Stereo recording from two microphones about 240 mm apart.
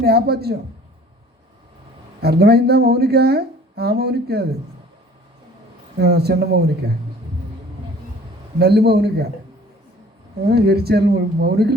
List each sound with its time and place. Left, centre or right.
0.0 s speech: right
2.2 s speech: right
6.0 s speech: right
8.5 s speech: right
10.4 s speech: right